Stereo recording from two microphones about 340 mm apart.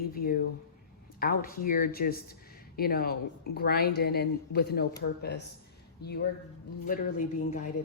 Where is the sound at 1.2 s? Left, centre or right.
Left.